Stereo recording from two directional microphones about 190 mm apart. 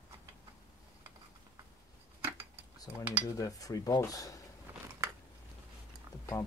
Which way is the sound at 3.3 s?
20° left (ahead or behind).